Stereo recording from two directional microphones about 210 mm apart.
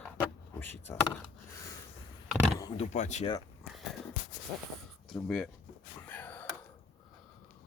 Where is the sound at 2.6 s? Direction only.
20° left (ahead or behind).